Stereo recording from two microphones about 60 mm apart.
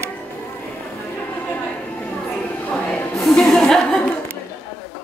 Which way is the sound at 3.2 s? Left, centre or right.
Centre.